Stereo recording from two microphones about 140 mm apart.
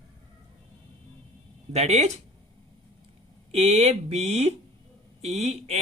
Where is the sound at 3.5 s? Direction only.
50° right (ahead or behind).